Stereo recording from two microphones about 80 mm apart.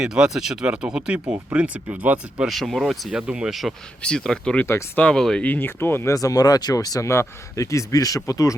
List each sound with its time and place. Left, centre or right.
0.0 s speech: centre
2.5 s speech: centre
4.0 s speech: centre
5.4 s speech: left
6.1 s speech: left